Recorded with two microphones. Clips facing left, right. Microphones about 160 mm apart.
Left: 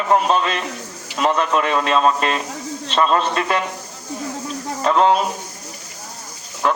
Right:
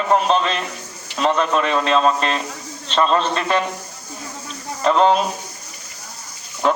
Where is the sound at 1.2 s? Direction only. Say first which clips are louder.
Even; 10° left (ahead or behind).